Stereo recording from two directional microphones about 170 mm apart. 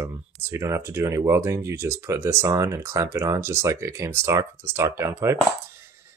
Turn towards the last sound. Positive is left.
turn(degrees=-15)  # may be behind; listen again after turning